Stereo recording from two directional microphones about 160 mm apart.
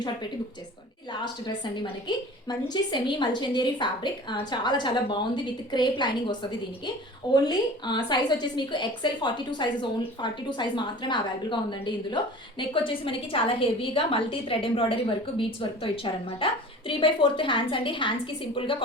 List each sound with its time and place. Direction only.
1.2 s a woman's voice: 25° left (ahead or behind)
7.4 s a woman's voice: 25° left (ahead or behind)